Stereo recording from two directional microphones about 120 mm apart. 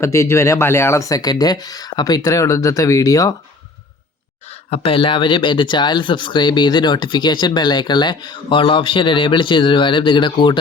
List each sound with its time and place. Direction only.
0.0 s speech: 25° left (ahead or behind)
4.4 s speech: 60° left (ahead or behind); by 10.6 s 40° left (ahead or behind)